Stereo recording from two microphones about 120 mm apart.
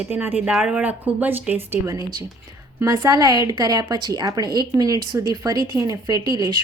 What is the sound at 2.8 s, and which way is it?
A woman's voice, 35° right (ahead or behind).